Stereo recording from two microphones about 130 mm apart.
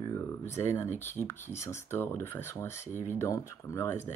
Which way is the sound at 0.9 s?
65° left (ahead or behind).